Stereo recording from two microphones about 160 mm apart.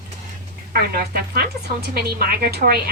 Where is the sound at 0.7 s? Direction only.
75° right (ahead or behind).